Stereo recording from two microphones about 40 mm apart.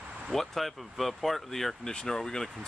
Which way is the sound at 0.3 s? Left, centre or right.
Centre.